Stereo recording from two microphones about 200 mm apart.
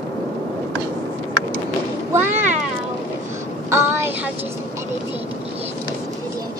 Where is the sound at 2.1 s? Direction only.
10° right (ahead or behind).